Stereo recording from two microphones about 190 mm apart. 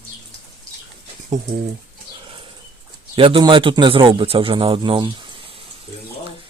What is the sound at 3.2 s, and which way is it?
A man's voice, 25° right (ahead or behind).